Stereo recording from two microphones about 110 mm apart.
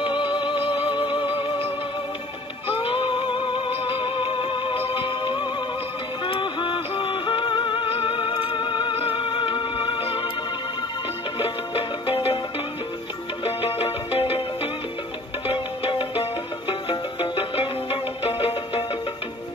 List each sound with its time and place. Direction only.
0.0 s music: 50° left (ahead or behind)
2.8 s music: 50° left (ahead or behind)
11.3 s music: 55° left (ahead or behind)
13.4 s music: 60° left (ahead or behind)